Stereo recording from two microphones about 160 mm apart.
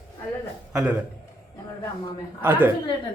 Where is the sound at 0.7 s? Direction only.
5° right (ahead or behind).